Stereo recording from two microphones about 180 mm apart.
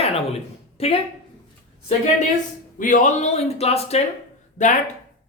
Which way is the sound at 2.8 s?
45° left (ahead or behind).